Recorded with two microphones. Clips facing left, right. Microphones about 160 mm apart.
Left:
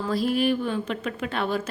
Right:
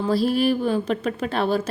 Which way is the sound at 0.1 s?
35° right (ahead or behind).